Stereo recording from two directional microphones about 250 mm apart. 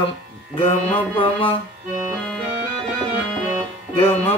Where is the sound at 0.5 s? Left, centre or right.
Left.